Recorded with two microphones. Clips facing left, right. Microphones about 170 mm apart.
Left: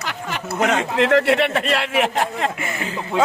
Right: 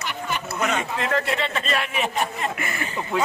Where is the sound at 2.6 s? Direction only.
20° left (ahead or behind).